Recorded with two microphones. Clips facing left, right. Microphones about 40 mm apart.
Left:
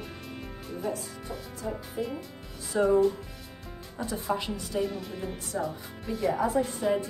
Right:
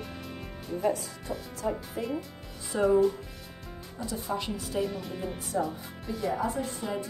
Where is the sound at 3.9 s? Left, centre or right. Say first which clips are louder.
Left 2 dB; left.